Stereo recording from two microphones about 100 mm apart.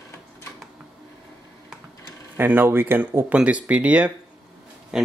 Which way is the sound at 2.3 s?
20° right (ahead or behind).